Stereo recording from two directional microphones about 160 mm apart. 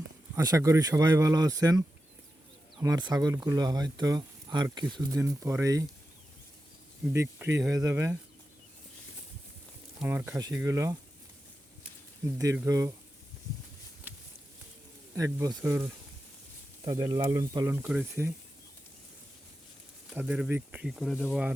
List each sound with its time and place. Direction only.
0.3 s speech: 20° right (ahead or behind)
7.1 s speech: 15° right (ahead or behind)
10.0 s speech: 10° right (ahead or behind)
12.2 s speech: 20° right (ahead or behind)
14.1 s a sound: 10° right (ahead or behind)
15.1 s speech: 20° right (ahead or behind)
20.1 s speech: 5° right (ahead or behind)